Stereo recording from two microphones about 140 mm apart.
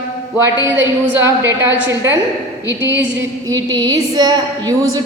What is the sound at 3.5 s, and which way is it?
A woman's voice, 25° right (ahead or behind).